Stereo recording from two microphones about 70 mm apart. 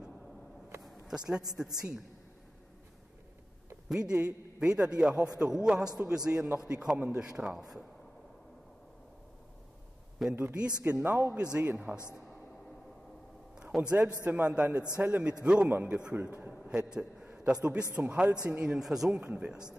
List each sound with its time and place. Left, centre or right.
1.0 s a man's voice: centre
3.9 s a man's voice: centre
10.3 s a man's voice: right
13.8 s a man's voice: centre
16.2 s a man's voice: right
16.6 s a sound: centre
17.5 s a man's voice: centre
19.3 s a man's voice: centre